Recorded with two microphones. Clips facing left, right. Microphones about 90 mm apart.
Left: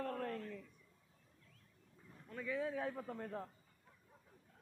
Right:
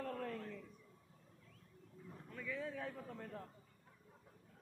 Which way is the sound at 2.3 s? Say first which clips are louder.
Left 5 dB; 5° left (ahead or behind).